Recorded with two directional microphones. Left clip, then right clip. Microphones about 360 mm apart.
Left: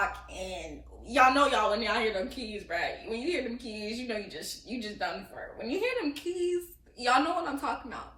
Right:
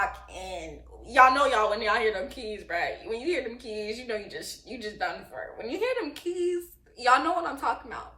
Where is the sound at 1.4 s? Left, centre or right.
Centre.